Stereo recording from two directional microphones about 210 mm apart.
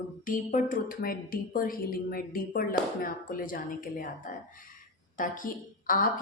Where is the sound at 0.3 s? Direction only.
40° left (ahead or behind).